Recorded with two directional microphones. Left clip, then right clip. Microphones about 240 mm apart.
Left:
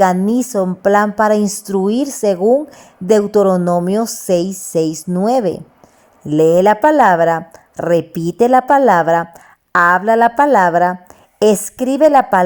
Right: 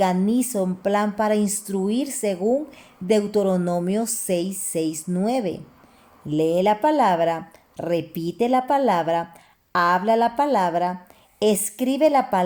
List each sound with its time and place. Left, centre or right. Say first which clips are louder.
0.0 s a woman's voice: left 8 dB; left